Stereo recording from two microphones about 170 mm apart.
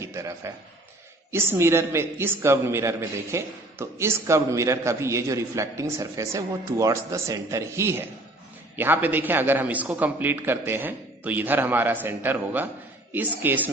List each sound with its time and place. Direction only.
0.0 s a man's voice: 15° right (ahead or behind)